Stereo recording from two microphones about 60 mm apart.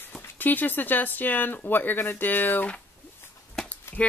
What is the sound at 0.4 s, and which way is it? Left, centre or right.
Speech, left.